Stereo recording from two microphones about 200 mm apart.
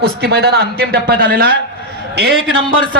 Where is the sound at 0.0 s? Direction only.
55° right (ahead or behind).